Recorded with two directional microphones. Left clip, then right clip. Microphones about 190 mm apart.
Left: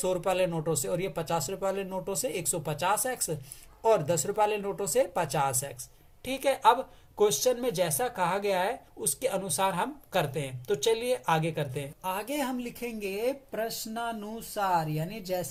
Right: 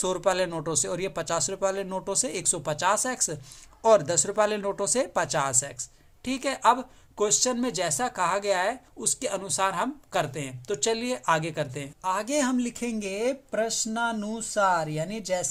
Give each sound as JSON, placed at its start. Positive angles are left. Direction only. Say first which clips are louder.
{"t": 0.0, "sound": "speech", "louder": "right 2 dB", "side_deg": -35}